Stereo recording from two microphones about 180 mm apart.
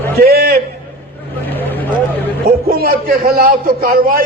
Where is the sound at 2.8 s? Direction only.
55° right (ahead or behind).